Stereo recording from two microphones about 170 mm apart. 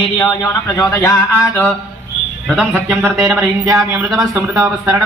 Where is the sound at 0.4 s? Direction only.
15° left (ahead or behind).